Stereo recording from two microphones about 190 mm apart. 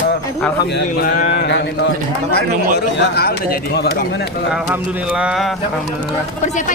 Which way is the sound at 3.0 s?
55° left (ahead or behind).